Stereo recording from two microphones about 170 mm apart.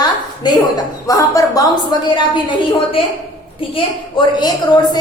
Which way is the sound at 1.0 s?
20° left (ahead or behind).